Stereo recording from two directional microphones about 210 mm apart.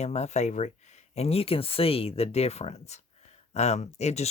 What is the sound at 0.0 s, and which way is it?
Speech, 30° left (ahead or behind).